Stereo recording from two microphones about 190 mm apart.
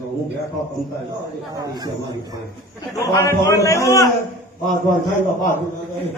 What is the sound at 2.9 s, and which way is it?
A man's voice, 15° left (ahead or behind).